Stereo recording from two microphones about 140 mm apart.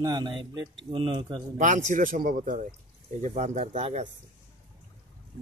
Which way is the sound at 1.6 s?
60° right (ahead or behind).